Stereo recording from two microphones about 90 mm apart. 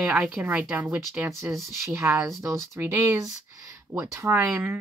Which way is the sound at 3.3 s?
40° right (ahead or behind).